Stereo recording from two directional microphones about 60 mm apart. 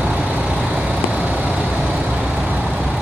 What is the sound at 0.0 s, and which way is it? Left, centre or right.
Vehicle, centre.